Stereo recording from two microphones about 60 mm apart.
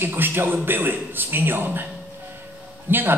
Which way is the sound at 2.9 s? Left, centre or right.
Right.